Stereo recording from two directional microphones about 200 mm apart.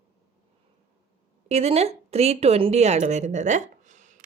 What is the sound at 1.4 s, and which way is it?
A woman's voice, 30° right (ahead or behind).